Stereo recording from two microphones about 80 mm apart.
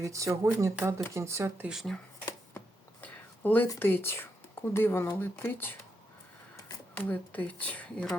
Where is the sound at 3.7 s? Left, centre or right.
Left.